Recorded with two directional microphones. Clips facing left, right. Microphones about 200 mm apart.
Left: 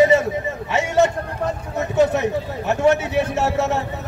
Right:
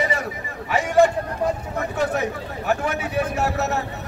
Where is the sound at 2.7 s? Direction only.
25° left (ahead or behind).